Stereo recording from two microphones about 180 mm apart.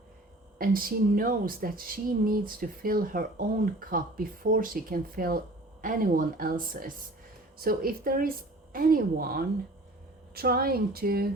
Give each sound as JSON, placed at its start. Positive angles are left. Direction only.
{"t": 0.6, "sound": "speech", "side_deg": -55}